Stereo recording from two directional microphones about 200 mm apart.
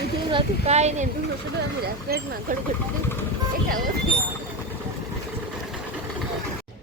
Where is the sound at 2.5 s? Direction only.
45° right (ahead or behind).